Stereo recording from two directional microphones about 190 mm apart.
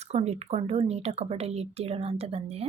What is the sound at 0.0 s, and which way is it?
A woman's voice, 35° right (ahead or behind).